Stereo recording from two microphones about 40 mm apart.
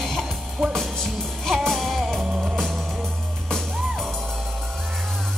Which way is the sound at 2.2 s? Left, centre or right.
Centre.